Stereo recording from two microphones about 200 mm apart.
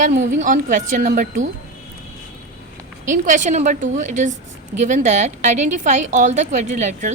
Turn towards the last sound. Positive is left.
turn(degrees=-35)  # may be behind; listen again after turning